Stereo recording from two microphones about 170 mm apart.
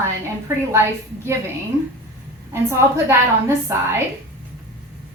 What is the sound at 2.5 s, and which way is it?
Speech, 15° right (ahead or behind).